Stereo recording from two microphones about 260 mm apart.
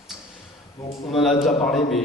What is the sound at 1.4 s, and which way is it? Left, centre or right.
Speech, left.